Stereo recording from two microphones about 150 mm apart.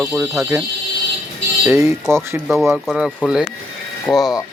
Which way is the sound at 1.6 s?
15° right (ahead or behind).